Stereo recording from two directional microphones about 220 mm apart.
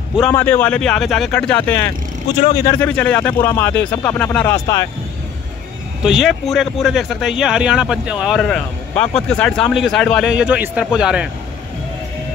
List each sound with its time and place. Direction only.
0.3 s a man's voice: 10° left (ahead or behind)
2.4 s speech: 20° left (ahead or behind)
2.8 s speech: 5° left (ahead or behind)
6.0 s a man's voice: centre (ahead or behind)